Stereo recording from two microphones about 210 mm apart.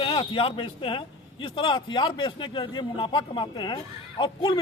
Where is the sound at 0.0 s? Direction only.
25° left (ahead or behind).